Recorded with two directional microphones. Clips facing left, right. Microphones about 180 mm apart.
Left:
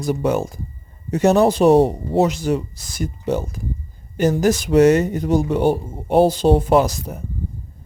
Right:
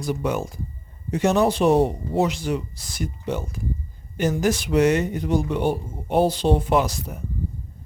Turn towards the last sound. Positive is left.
turn(degrees=40)  # may be behind; listen again after turning